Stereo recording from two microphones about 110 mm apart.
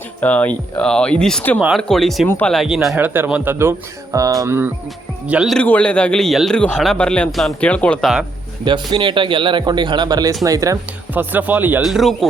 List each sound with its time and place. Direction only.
0.2 s speech: 15° left (ahead or behind); by 3.0 s 5° right (ahead or behind)
3.0 s speech: 20° right (ahead or behind)
4.2 s music: 30° right (ahead or behind)
5.3 s speech: 5° right (ahead or behind)
5.5 s speech: 10° left (ahead or behind)
8.0 s speech: 5° right (ahead or behind)
8.6 s speech: 45° right (ahead or behind)
11.1 s speech: 15° right (ahead or behind)
11.8 s speech: centre (ahead or behind)